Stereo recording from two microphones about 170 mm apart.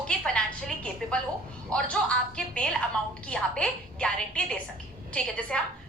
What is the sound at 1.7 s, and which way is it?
A woman's voice, 5° left (ahead or behind).